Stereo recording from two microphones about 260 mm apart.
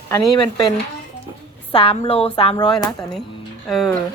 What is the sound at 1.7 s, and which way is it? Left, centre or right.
Speech, left.